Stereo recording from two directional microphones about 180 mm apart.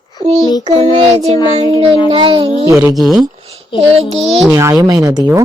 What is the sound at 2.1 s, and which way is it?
Speech, 30° right (ahead or behind).